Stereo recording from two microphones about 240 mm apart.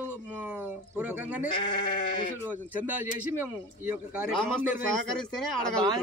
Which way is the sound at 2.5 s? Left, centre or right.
Centre.